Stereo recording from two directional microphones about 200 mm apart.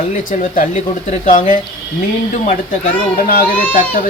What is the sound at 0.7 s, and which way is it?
Speech, 30° left (ahead or behind).